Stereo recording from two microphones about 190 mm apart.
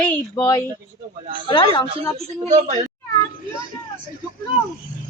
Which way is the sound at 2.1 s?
35° right (ahead or behind).